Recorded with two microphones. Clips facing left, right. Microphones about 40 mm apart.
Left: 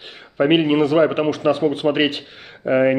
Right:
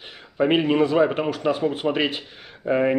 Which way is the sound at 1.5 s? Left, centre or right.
Centre.